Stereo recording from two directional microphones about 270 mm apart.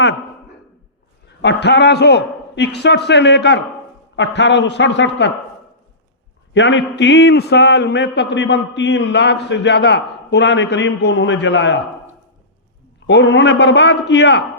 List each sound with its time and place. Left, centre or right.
1.4 s a man's voice: left
6.5 s a man's voice: left
13.1 s a man's voice: left